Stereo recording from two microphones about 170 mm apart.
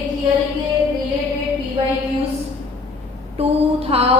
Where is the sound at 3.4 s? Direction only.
35° right (ahead or behind).